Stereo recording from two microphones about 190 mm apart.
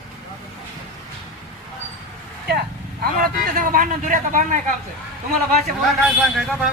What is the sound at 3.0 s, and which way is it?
Speech, 50° right (ahead or behind).